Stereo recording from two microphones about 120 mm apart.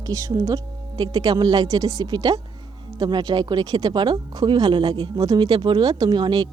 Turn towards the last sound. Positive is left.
turn(degrees=-40)  # may be behind; listen again after turning